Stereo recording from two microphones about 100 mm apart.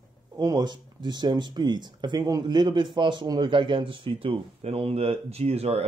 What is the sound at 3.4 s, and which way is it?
Speech, 60° right (ahead or behind).